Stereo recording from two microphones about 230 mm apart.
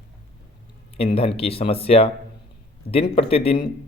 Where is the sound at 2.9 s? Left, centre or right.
Left.